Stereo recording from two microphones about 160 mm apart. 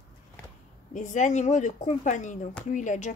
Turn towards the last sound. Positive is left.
turn(degrees=50)  # may be behind; listen again after turning